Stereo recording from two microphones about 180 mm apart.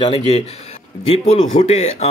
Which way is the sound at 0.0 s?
30° left (ahead or behind).